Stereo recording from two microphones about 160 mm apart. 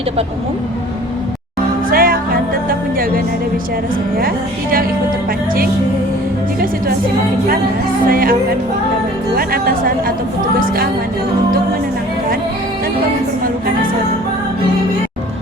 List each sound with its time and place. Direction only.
1.9 s music: 65° right (ahead or behind)
8.0 s music: 65° right (ahead or behind)
9.3 s speech: 70° right (ahead or behind)